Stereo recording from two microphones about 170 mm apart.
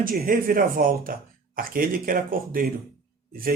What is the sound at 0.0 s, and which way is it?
Speech, 55° right (ahead or behind).